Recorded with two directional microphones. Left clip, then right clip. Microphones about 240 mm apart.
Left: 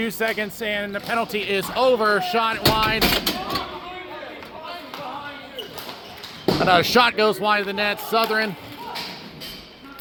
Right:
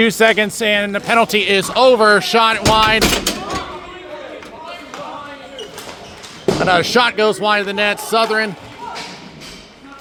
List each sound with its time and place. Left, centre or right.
0.0 s speech: right
6.4 s speech: centre